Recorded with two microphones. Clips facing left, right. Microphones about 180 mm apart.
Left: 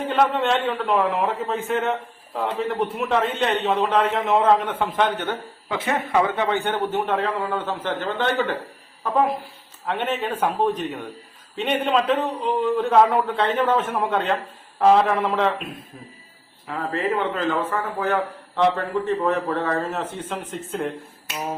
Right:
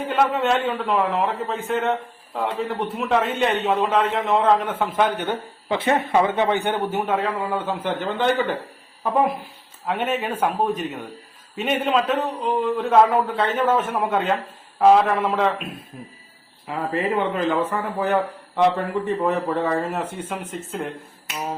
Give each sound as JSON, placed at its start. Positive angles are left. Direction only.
{"t": 0.1, "sound": "a man's voice", "side_deg": 0}
{"t": 5.6, "sound": "a man's voice", "side_deg": -30}
{"t": 9.8, "sound": "a man's voice", "side_deg": -10}
{"t": 16.6, "sound": "a man's voice", "side_deg": -15}